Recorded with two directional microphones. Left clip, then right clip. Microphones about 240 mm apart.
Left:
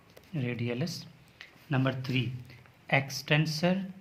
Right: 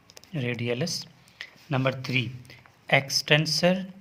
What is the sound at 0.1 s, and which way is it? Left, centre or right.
Speech, right.